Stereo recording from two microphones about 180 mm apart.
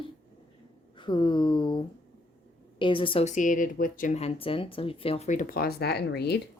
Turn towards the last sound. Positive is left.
turn(degrees=65)  # may be behind; listen again after turning